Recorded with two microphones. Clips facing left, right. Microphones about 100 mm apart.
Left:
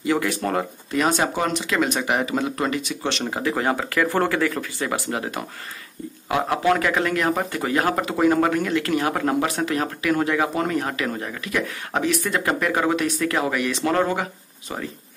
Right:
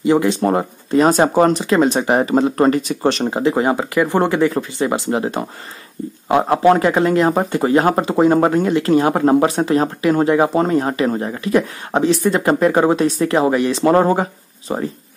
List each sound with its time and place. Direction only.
0.0 s speech: 25° right (ahead or behind); by 3.3 s 40° right (ahead or behind)
3.3 s speech: 25° right (ahead or behind)